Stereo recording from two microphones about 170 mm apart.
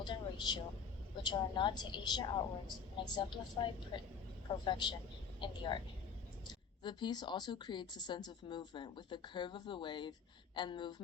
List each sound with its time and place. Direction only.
0.0 s a woman's voice: 25° left (ahead or behind)